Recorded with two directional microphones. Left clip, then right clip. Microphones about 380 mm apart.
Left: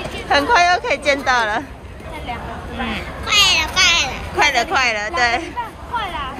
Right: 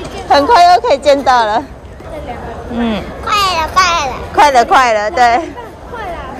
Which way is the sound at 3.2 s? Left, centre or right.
Centre.